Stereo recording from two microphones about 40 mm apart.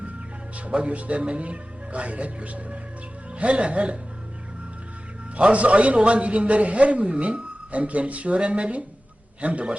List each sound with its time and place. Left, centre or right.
0.6 s a man's voice: right
5.4 s a man's voice: right